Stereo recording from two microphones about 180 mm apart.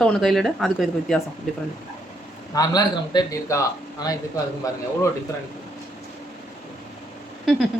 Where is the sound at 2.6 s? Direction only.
20° left (ahead or behind).